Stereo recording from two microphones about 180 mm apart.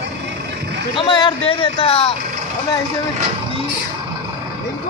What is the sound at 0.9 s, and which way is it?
A man's voice, 25° left (ahead or behind).